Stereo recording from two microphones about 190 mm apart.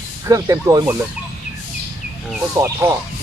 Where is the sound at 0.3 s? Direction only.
15° right (ahead or behind).